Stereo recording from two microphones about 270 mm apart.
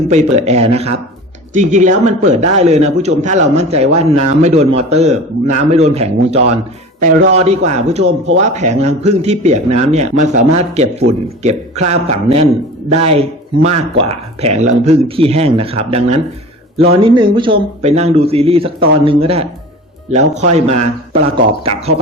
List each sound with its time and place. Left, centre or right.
0.1 s a man's voice: right
14.4 s a man's voice: right